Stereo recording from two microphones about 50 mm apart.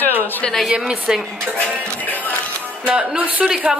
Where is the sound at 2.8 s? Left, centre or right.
Right.